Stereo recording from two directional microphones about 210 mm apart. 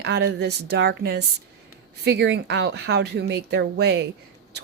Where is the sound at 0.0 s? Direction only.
55° right (ahead or behind).